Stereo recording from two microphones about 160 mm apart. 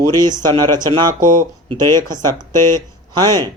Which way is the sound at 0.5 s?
25° right (ahead or behind).